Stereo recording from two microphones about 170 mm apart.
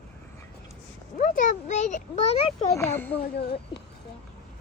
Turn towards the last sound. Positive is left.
turn(degrees=70)  # may be behind; listen again after turning